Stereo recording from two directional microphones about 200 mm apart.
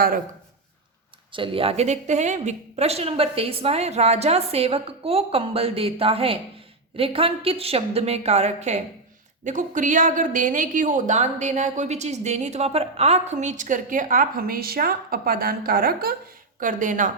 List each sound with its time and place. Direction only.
1.3 s a woman's voice: 25° right (ahead or behind)